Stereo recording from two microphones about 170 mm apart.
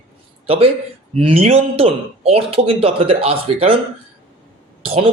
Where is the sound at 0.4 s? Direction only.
35° right (ahead or behind).